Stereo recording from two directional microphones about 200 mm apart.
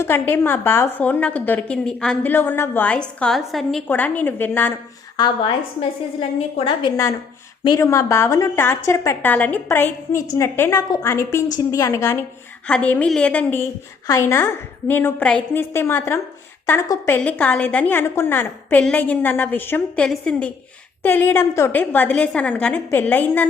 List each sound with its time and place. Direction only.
0.0 s a woman's voice: 10° left (ahead or behind)
5.1 s a woman's voice: 25° left (ahead or behind)
6.7 s a woman's voice: 20° left (ahead or behind)